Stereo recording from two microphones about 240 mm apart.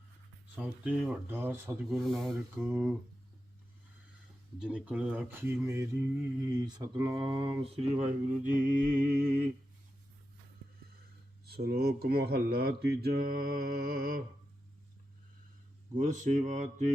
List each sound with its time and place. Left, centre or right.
0.5 s speech: centre
4.6 s speech: centre; by 9.5 s right
11.4 s speech: right
16.0 s speech: right